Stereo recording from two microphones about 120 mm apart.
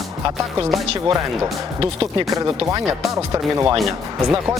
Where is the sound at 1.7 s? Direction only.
35° right (ahead or behind).